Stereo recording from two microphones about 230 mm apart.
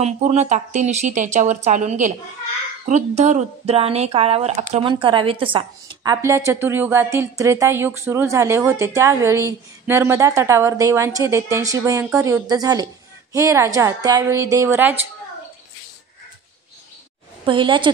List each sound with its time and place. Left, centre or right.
0.0 s speech: right; by 15.0 s centre
17.5 s a woman's voice: right